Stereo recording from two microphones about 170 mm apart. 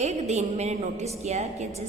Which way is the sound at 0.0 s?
40° right (ahead or behind).